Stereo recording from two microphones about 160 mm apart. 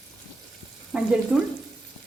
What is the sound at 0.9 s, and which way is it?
Frying, 5° right (ahead or behind).